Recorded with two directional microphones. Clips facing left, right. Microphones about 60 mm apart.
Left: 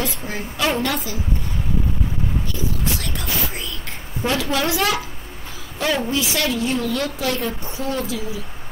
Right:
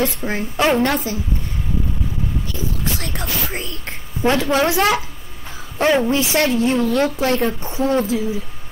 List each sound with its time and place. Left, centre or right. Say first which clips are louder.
0.2 s a woman's voice: right 5 dB; right
3.2 s speech: right 2 dB; right